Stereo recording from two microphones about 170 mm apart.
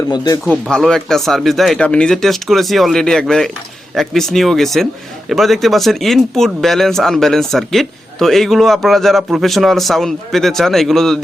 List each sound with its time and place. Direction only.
0.7 s speech: 5° left (ahead or behind)